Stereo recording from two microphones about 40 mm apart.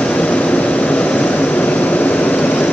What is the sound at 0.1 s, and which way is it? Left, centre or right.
Vehicle, left.